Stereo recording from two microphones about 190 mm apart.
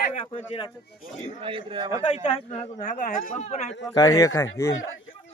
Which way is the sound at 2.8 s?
45° left (ahead or behind).